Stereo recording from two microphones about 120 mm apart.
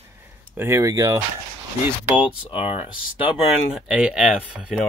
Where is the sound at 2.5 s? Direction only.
50° left (ahead or behind).